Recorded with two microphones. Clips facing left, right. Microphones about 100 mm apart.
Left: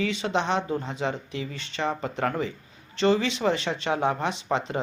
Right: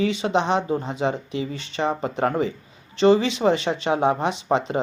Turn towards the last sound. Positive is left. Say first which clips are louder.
# right 5 dB
turn(degrees=-20)  # may be behind; listen again after turning